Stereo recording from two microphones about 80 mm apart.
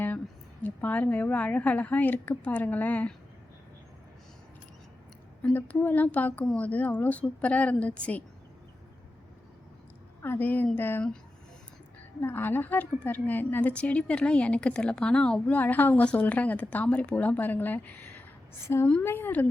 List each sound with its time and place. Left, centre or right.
0.6 s a woman's voice: centre
5.5 s a woman's voice: left
10.2 s a woman's voice: left
12.2 s a woman's voice: left
18.7 s a woman's voice: left